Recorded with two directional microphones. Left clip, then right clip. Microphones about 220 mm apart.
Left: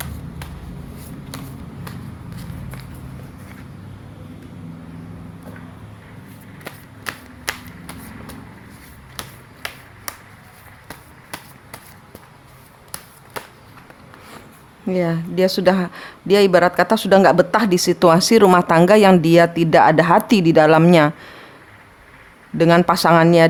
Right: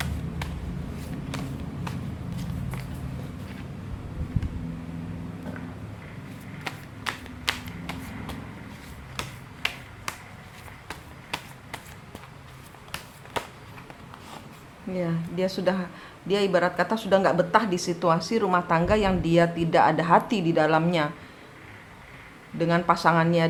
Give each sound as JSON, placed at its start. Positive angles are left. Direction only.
{"t": 7.0, "sound": "a sound", "side_deg": 5}
{"t": 14.8, "sound": "speech", "side_deg": 50}
{"t": 22.5, "sound": "speech", "side_deg": 50}